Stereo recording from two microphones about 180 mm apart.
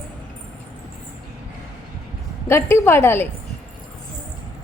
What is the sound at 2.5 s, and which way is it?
Speech, 15° left (ahead or behind).